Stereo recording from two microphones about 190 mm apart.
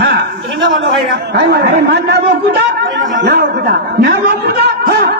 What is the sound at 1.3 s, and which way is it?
A man's voice, 60° right (ahead or behind).